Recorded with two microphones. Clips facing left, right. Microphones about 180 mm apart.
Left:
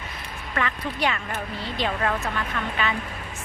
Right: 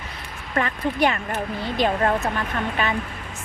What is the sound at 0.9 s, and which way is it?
A woman's voice, 45° right (ahead or behind).